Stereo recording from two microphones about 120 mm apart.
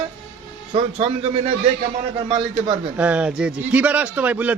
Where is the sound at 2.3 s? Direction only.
35° right (ahead or behind).